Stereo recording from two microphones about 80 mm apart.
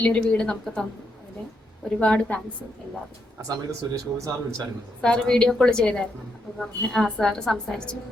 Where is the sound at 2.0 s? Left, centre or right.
Centre.